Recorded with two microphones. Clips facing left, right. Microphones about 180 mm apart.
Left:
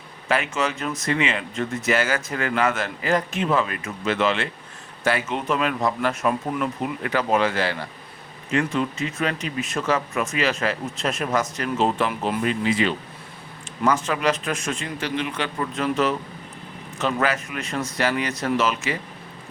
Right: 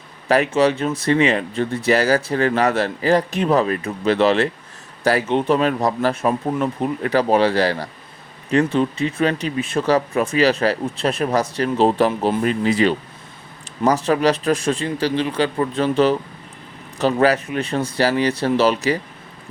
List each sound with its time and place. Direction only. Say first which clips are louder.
0.3 s speech: right 8 dB; 35° right (ahead or behind)